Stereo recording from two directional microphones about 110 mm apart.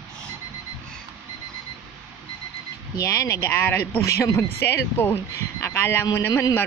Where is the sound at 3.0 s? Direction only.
30° left (ahead or behind).